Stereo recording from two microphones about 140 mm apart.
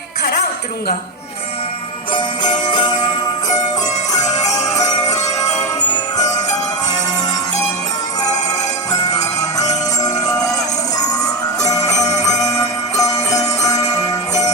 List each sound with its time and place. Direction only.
2.6 s music: 30° left (ahead or behind)
4.1 s music: 25° left (ahead or behind)
8.9 s music: 25° left (ahead or behind)